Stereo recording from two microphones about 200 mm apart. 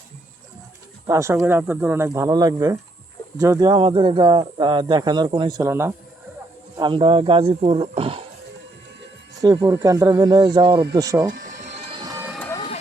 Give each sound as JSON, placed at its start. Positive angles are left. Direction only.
{"t": 1.0, "sound": "speech", "side_deg": -15}
{"t": 9.4, "sound": "speech", "side_deg": -20}
{"t": 11.3, "sound": "music", "side_deg": -40}
{"t": 11.9, "sound": "train", "side_deg": -15}